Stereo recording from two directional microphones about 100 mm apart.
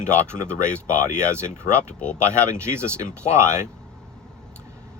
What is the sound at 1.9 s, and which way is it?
Speech, 10° left (ahead or behind).